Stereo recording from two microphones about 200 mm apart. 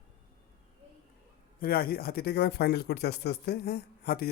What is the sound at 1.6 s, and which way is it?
Speech, 50° left (ahead or behind).